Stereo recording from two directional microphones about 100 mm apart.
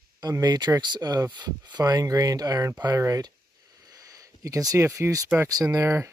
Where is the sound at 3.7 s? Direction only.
35° right (ahead or behind).